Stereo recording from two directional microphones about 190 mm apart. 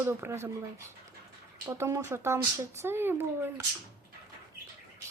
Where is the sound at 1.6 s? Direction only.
15° right (ahead or behind).